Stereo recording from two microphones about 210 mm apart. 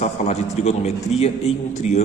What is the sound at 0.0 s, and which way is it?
A man's voice, 30° left (ahead or behind).